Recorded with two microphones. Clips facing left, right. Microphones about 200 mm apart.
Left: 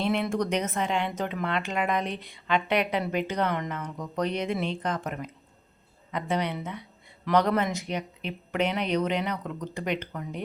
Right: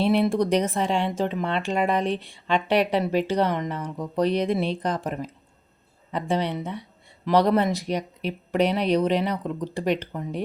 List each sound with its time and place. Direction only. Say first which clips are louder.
0.0 s speech: right 6 dB; 35° right (ahead or behind)